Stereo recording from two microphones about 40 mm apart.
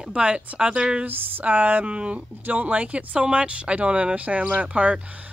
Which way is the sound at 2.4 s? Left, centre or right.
Right.